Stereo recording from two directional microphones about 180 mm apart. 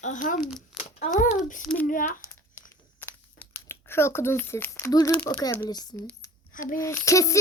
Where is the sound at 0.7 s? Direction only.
5° right (ahead or behind).